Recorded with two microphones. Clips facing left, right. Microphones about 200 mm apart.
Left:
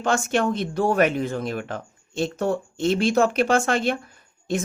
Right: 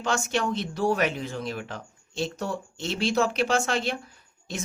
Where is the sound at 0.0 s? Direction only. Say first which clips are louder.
Left 5 dB; 55° left (ahead or behind).